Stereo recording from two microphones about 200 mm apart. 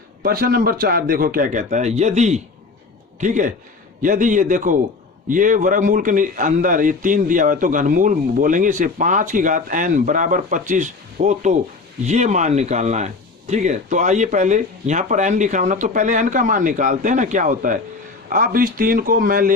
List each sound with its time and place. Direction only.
0.2 s a man's voice: 45° right (ahead or behind)